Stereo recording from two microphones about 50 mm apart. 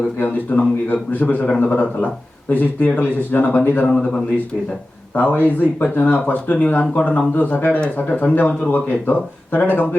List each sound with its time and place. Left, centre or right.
0.2 s speech: left
5.1 s speech: left